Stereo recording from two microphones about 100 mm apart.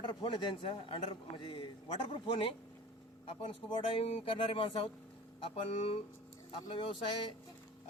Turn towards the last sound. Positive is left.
turn(degrees=55)  # may be behind; listen again after turning